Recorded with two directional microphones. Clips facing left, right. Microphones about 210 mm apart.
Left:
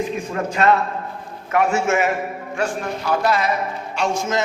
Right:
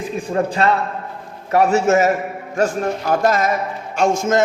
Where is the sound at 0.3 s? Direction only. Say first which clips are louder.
Right 2 dB; 35° right (ahead or behind).